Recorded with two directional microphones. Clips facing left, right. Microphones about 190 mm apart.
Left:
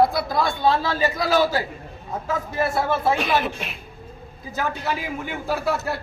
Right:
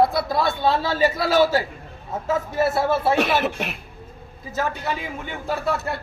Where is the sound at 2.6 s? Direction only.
5° right (ahead or behind).